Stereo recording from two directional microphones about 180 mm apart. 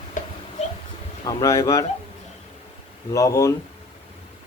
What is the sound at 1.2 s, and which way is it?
Speech, 20° left (ahead or behind).